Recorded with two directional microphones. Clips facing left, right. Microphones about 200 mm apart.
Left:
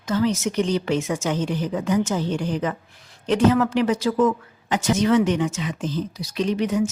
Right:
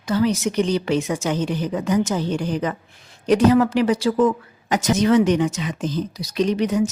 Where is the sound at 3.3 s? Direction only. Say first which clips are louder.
Right 3 dB; 10° right (ahead or behind).